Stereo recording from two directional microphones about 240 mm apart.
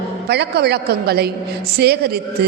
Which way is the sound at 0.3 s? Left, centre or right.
Right.